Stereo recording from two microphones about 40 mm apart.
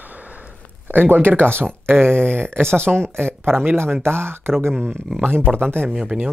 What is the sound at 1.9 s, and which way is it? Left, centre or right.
Speech, right.